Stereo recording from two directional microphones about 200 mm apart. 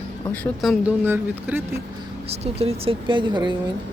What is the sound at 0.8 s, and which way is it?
Speech, 10° right (ahead or behind).